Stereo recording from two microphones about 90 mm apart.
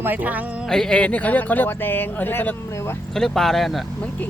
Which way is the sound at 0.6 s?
5° left (ahead or behind).